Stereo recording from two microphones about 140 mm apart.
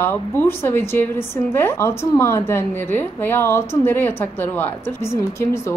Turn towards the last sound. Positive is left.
turn(degrees=20)  # may be behind; listen again after turning